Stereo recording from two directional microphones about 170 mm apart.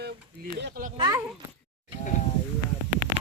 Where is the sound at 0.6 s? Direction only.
60° right (ahead or behind).